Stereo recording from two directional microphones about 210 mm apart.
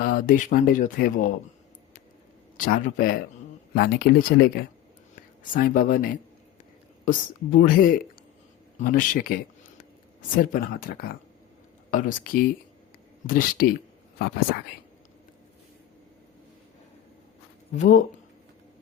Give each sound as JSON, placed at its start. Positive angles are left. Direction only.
{"t": 0.0, "sound": "speech", "side_deg": 45}
{"t": 2.6, "sound": "speech", "side_deg": 45}
{"t": 17.7, "sound": "speech", "side_deg": 40}